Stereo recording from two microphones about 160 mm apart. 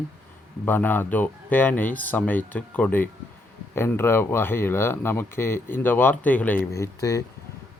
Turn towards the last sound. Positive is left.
turn(degrees=20)  # may be behind; listen again after turning